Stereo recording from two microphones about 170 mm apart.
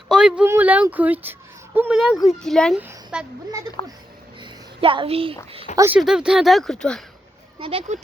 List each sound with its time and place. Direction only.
0.1 s a sound: 5° right (ahead or behind)
0.4 s speech: 10° right (ahead or behind)
3.8 s speech: 25° left (ahead or behind)
4.4 s a sound: 30° right (ahead or behind)
5.7 s speech: 15° right (ahead or behind)
6.0 s speech: 5° right (ahead or behind)
7.6 s speech: 35° right (ahead or behind)